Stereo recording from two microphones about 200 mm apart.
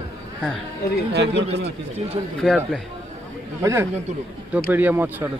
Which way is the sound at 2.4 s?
5° left (ahead or behind).